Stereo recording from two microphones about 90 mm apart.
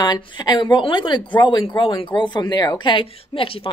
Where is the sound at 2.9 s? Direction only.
85° left.